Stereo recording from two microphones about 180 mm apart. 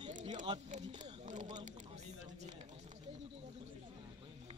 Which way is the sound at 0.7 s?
40° right (ahead or behind).